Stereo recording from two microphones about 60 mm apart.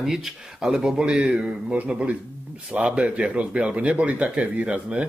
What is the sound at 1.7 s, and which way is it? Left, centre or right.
Speech, right.